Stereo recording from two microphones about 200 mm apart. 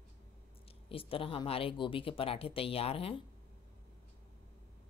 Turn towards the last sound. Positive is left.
turn(degrees=30)  # may be behind; listen again after turning